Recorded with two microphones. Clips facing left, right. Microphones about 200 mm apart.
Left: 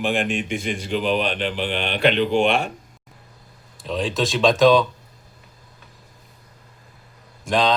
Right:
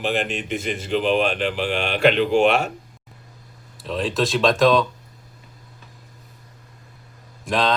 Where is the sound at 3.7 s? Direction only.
Centre (ahead or behind).